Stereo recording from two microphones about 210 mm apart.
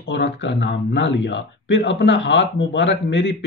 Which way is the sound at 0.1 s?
55° left (ahead or behind).